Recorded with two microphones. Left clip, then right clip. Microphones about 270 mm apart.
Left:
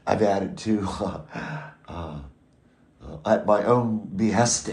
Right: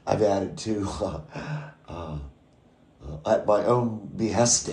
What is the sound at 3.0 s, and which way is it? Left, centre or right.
Speech, centre.